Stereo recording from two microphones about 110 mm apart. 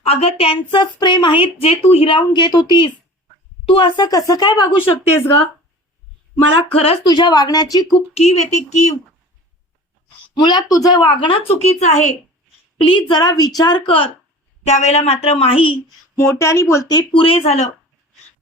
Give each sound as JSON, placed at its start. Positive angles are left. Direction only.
{"t": 0.0, "sound": "speech", "side_deg": 70}
{"t": 6.7, "sound": "speech", "side_deg": 60}
{"t": 7.0, "sound": "speech", "side_deg": 40}
{"t": 8.1, "sound": "speech", "side_deg": 75}
{"t": 10.3, "sound": "speech", "side_deg": 40}
{"t": 11.6, "sound": "speech", "side_deg": 90}
{"t": 12.9, "sound": "speech", "side_deg": 45}
{"t": 14.7, "sound": "a woman's voice", "side_deg": 85}
{"t": 16.1, "sound": "speech", "side_deg": 25}
{"t": 16.9, "sound": "speech", "side_deg": 55}